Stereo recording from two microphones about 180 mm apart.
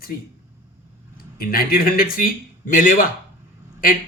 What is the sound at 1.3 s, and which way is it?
Speech, 55° left (ahead or behind).